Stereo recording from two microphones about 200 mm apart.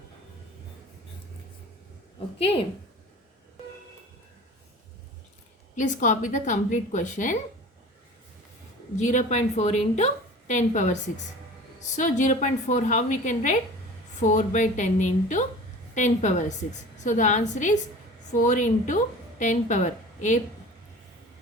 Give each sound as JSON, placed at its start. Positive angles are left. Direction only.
{"t": 5.7, "sound": "a woman's voice", "side_deg": 40}
{"t": 9.0, "sound": "a woman's voice", "side_deg": 35}
{"t": 11.9, "sound": "a woman's voice", "side_deg": 40}